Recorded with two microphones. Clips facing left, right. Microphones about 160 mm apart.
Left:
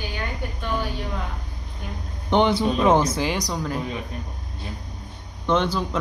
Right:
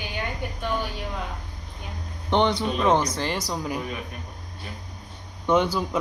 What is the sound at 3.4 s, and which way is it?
Speech, 5° right (ahead or behind).